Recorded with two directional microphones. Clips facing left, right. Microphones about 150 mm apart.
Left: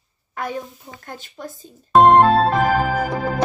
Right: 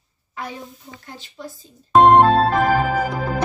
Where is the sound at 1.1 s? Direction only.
50° left (ahead or behind).